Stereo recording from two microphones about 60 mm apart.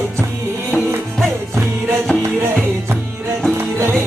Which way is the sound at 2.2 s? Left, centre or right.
Right.